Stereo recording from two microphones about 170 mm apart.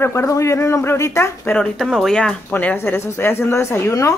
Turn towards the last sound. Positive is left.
turn(degrees=15)  # may be behind; listen again after turning